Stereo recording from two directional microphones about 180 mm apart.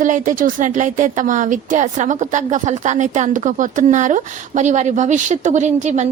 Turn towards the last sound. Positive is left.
turn(degrees=-40)  # may be behind; listen again after turning